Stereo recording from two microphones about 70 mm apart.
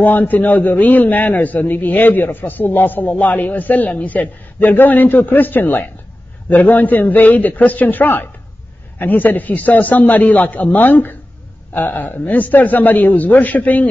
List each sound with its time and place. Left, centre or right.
0.0 s a man's voice: left